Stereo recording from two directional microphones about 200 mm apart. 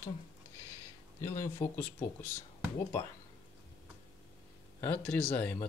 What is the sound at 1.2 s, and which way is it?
Speech, 15° left (ahead or behind).